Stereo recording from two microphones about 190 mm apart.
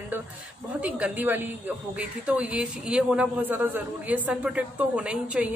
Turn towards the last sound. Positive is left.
turn(degrees=-5)  # may be behind; listen again after turning